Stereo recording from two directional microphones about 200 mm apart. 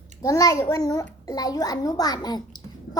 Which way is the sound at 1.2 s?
20° left (ahead or behind).